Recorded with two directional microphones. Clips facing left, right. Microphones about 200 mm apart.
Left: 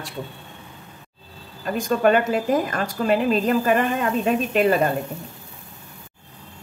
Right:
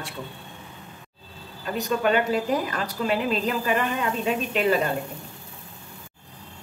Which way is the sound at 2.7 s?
45° left (ahead or behind).